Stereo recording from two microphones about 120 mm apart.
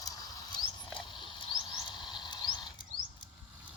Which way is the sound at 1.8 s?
40° left (ahead or behind).